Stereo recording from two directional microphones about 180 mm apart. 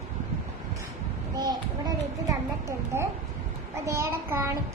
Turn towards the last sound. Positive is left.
turn(degrees=-15)  # may be behind; listen again after turning